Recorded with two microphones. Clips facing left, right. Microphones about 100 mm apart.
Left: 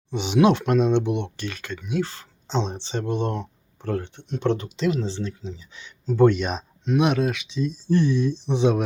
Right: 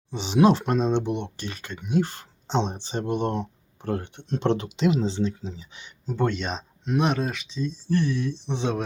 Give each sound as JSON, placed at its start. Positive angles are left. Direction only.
{"t": 0.1, "sound": "speech", "side_deg": -30}
{"t": 1.9, "sound": "speech", "side_deg": -45}
{"t": 2.8, "sound": "speech", "side_deg": -40}
{"t": 3.3, "sound": "a sound", "side_deg": -20}
{"t": 4.4, "sound": "speech", "side_deg": -90}
{"t": 4.8, "sound": "speech", "side_deg": -15}
{"t": 6.1, "sound": "speech", "side_deg": 10}
{"t": 7.9, "sound": "speech", "side_deg": 20}